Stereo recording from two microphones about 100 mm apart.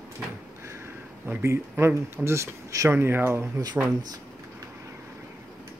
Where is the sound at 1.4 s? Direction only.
25° right (ahead or behind).